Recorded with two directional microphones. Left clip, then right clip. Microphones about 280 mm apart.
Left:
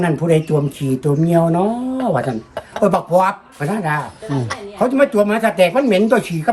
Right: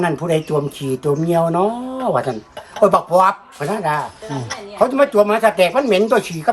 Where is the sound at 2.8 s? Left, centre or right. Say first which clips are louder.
Right 2 dB; centre.